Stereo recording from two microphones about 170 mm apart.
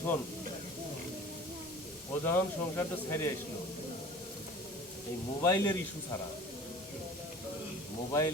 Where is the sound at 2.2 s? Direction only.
15° left (ahead or behind).